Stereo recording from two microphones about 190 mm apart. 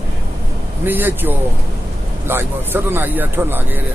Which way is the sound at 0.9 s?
10° right (ahead or behind).